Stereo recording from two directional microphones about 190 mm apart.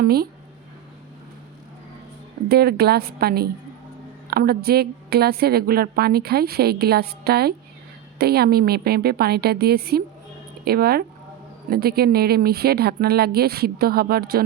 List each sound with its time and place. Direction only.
0.0 s speech: 55° right (ahead or behind)
2.5 s a woman's voice: 55° right (ahead or behind)